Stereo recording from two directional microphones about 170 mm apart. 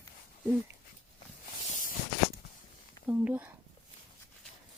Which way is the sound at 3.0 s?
10° right (ahead or behind).